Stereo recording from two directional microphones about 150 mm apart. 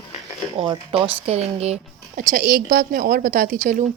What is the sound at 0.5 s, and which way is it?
Speech, 35° right (ahead or behind).